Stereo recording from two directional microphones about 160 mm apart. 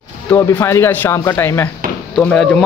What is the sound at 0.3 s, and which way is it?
A child's voice, 15° left (ahead or behind).